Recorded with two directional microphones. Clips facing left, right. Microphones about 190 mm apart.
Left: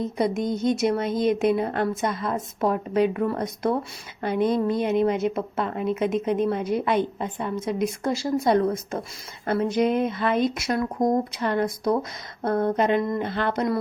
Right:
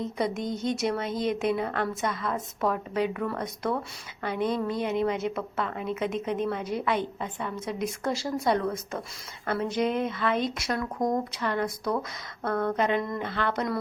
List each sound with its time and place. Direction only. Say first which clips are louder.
0.2 s speech: left 6 dB; 15° left (ahead or behind); by 3.7 s 35° left (ahead or behind)
4.3 s speech: left 6 dB; 15° left (ahead or behind)
7.2 s speech: left 4 dB; 30° left (ahead or behind)
7.6 s speech: left 5 dB; 15° left (ahead or behind)
9.6 s speech: left 5 dB; 15° left (ahead or behind)
11.0 s speech: left 4 dB; 30° left (ahead or behind)
13.3 s speech: left 2 dB; 20° left (ahead or behind)